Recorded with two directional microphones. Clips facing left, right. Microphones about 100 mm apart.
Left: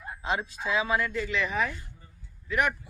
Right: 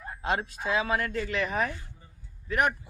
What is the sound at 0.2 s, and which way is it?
A man's voice, 50° right (ahead or behind).